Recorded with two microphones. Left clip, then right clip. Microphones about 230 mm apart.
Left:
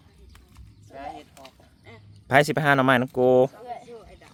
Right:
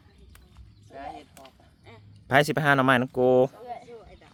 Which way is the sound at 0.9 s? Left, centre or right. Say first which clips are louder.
Left 2 dB; centre.